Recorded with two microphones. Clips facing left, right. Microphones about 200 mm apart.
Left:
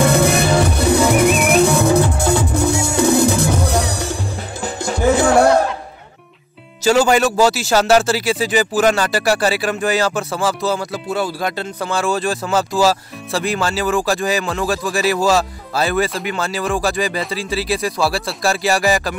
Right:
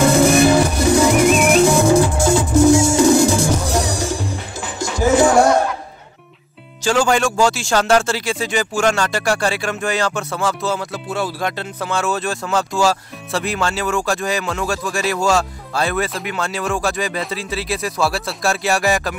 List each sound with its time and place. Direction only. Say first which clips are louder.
0.0 s music: right 3 dB; 60° left (ahead or behind)
6.8 s speech: left 3 dB; 5° left (ahead or behind)